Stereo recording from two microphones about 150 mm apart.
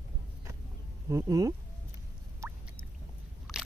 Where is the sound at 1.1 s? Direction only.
20° right (ahead or behind).